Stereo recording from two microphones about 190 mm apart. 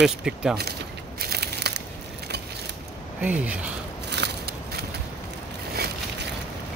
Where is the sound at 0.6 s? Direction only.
55° right (ahead or behind).